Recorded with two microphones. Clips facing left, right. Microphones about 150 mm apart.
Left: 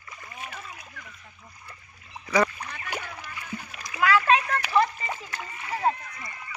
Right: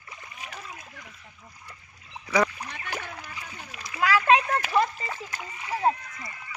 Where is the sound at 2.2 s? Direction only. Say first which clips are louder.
Left 1 dB; centre (ahead or behind).